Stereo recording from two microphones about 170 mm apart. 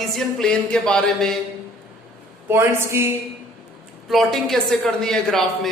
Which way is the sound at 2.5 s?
15° right (ahead or behind).